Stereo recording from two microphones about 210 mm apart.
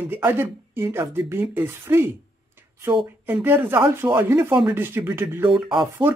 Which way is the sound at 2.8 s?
20° right (ahead or behind).